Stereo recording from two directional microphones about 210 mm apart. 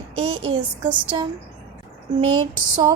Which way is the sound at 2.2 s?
90° right.